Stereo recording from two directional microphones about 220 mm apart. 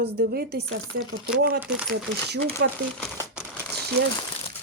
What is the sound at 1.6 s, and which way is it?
Speech, 5° right (ahead or behind).